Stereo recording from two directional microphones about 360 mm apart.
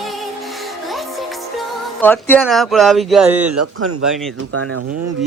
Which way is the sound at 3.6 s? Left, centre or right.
Right.